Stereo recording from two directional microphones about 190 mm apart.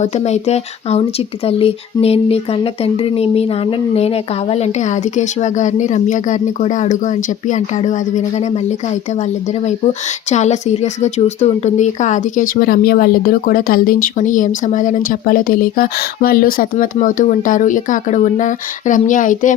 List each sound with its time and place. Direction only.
0.0 s speech: 35° left (ahead or behind)
9.6 s speech: 35° left (ahead or behind)